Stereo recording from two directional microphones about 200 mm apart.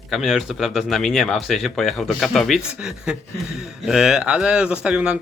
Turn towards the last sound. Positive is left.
turn(degrees=-5)  # may be behind; listen again after turning